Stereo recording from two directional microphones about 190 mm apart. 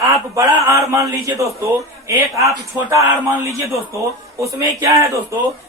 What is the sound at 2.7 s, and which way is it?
Speech, 15° right (ahead or behind).